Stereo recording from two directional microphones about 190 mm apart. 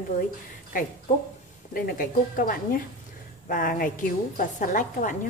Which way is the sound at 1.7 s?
50° left (ahead or behind).